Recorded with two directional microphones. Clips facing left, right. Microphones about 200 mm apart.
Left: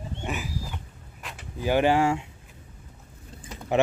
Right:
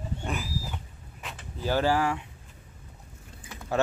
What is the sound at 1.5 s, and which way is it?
Speech, 15° left (ahead or behind).